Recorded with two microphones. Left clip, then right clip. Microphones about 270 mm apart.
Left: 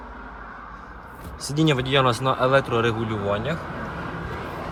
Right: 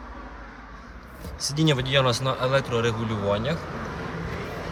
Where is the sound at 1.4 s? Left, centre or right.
Centre.